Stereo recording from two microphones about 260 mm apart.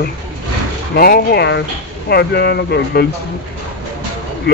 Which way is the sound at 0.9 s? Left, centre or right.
Left.